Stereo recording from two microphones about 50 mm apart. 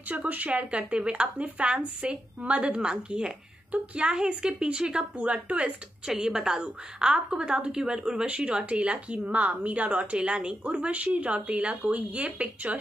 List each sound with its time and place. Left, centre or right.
0.1 s a woman's voice: right
6.0 s a woman's voice: centre; by 12.7 s right